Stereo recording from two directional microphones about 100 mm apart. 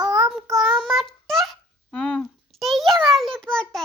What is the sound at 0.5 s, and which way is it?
Child singing, centre (ahead or behind).